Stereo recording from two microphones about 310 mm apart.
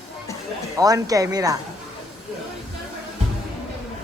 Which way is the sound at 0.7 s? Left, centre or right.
Centre.